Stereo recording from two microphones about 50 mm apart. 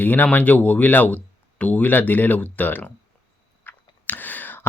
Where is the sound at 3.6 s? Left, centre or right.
Left.